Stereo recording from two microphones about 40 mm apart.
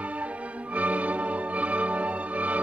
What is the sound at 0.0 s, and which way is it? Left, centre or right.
Music, right.